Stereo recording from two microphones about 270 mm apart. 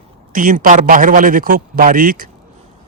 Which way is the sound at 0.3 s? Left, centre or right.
Right.